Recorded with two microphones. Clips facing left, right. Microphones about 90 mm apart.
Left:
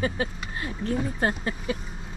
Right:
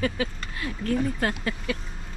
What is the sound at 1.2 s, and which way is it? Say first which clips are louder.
Speech: left 1 dB; 90° right.